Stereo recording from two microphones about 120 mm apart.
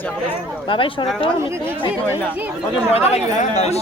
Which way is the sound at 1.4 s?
25° right (ahead or behind).